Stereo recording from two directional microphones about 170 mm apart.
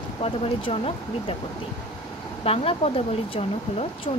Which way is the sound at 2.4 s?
35° left (ahead or behind).